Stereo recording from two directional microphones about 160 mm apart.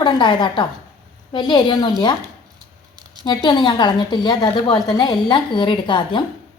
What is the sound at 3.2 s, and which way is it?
A woman's voice, 30° left (ahead or behind).